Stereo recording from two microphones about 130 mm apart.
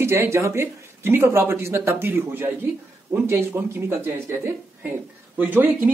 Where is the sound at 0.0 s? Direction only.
20° right (ahead or behind).